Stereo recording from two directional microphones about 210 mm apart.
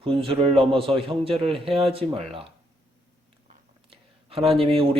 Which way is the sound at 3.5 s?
25° right (ahead or behind).